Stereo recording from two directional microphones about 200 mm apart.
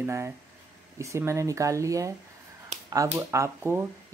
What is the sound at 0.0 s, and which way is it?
Speech, 15° right (ahead or behind).